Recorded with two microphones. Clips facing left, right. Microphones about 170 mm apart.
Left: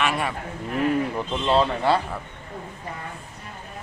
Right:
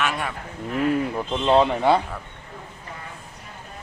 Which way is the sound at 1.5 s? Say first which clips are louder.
Right 3 dB; 20° right (ahead or behind).